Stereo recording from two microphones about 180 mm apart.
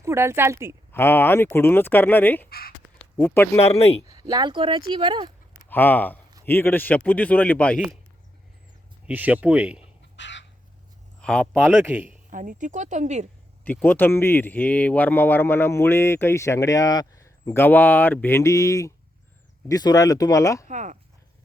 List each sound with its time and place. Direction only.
0.0 s speech: 15° right (ahead or behind)
0.9 s speech: 10° left (ahead or behind)
2.5 s speech: 55° left (ahead or behind)
3.2 s speech: 10° left (ahead or behind)
4.0 s speech: 20° right (ahead or behind)
5.6 s speech: 10° left (ahead or behind)
9.0 s speech: 10° right (ahead or behind)
10.2 s bird: 85° left
11.2 s speech: 5° left (ahead or behind)
11.7 s speech: 10° right (ahead or behind)
12.3 s speech: 45° right (ahead or behind)
13.7 s speech: 10° left (ahead or behind)
20.7 s speech: 45° right (ahead or behind)